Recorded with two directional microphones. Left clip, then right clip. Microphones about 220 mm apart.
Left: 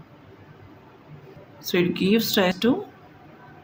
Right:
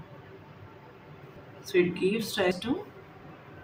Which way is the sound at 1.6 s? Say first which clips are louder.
Left 3 dB; 50° left (ahead or behind).